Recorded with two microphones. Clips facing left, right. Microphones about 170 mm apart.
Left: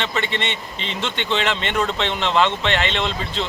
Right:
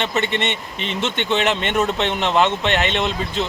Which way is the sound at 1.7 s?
15° right (ahead or behind).